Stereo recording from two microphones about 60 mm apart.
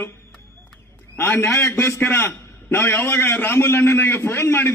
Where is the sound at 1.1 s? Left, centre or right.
Left.